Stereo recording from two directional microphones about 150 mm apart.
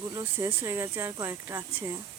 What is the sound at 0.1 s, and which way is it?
Speech, 20° right (ahead or behind).